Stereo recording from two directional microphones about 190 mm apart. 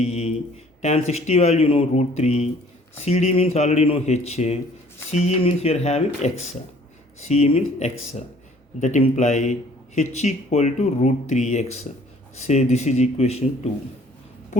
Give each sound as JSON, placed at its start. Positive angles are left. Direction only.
{"t": 0.0, "sound": "a sound", "side_deg": 35}
{"t": 0.8, "sound": "speech", "side_deg": 35}
{"t": 14.5, "sound": "speech", "side_deg": 40}